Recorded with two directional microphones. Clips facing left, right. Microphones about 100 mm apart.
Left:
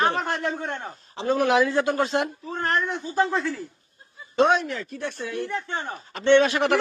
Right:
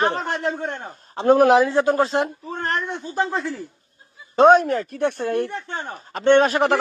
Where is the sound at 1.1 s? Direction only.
50° right (ahead or behind); by 2.3 s 30° right (ahead or behind).